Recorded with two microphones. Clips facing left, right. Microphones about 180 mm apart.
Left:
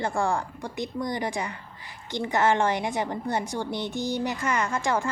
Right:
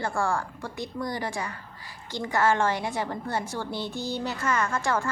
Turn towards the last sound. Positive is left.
turn(degrees=15)  # may be behind; listen again after turning